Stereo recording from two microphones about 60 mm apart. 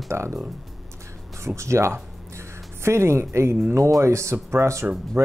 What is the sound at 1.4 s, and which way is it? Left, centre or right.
Speech, right.